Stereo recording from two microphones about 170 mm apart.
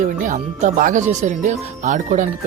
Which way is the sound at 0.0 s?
45° right (ahead or behind).